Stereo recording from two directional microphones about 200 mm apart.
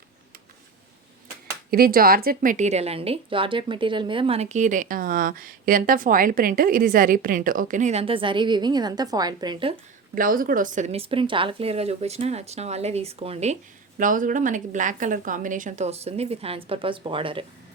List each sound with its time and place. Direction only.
1.7 s a woman's voice: 50° right (ahead or behind); by 9.7 s 25° right (ahead or behind)
10.2 s a woman's voice: 45° right (ahead or behind); by 17.4 s 25° right (ahead or behind)